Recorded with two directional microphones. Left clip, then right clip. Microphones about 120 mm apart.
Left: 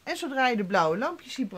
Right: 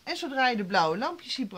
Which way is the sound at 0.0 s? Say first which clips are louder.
Even; 40° left (ahead or behind).